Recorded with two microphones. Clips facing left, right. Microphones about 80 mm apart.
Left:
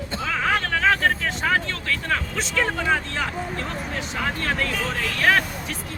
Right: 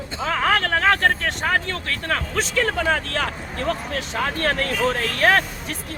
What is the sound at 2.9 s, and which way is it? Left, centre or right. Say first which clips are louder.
Speech: right 1 dB; right.